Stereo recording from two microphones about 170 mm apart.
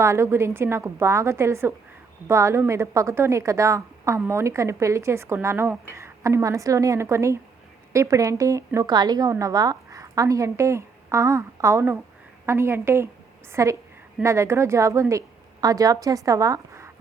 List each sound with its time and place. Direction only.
0.0 s a woman's voice: 15° right (ahead or behind)